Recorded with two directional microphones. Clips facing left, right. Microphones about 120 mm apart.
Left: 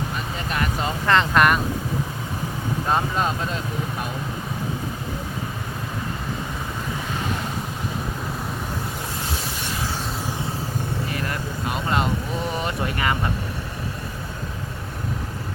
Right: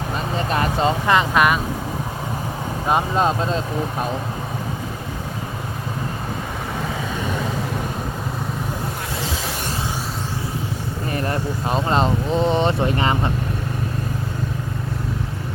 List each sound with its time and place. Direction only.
0.3 s vehicle: 30° right (ahead or behind)
1.0 s vehicle: 10° right (ahead or behind)
3.2 s speech: 25° right (ahead or behind)
11.1 s vehicle: 35° right (ahead or behind)